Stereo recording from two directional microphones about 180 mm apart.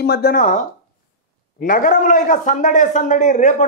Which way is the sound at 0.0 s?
60° left (ahead or behind).